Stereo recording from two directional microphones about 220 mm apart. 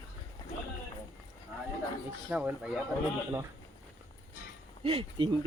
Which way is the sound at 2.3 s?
5° right (ahead or behind).